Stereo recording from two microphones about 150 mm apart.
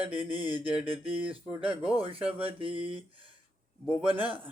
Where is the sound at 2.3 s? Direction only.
40° right (ahead or behind).